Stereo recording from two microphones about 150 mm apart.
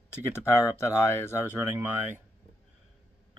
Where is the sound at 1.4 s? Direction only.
15° right (ahead or behind).